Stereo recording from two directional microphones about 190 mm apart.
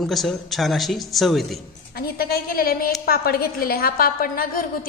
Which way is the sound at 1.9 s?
50° left (ahead or behind).